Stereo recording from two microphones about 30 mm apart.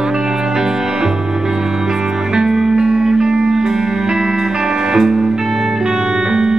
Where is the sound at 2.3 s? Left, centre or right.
Centre.